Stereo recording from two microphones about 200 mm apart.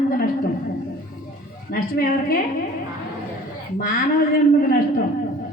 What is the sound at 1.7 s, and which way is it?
Speech, 45° left (ahead or behind).